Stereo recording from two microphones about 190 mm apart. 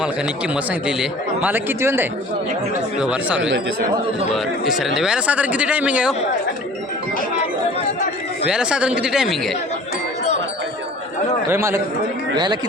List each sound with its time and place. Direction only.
0.0 s a man's voice: 5° right (ahead or behind)
4.6 s a man's voice: centre (ahead or behind)
8.4 s speech: 5° right (ahead or behind)
11.4 s a man's voice: 15° right (ahead or behind)